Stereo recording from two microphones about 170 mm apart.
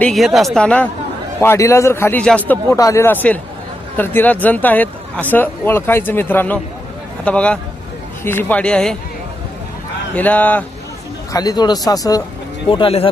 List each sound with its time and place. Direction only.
0.0 s a woman's voice: centre (ahead or behind)
10.2 s speech: 10° left (ahead or behind)
11.3 s speech: 20° left (ahead or behind)
12.7 s speech: 35° left (ahead or behind)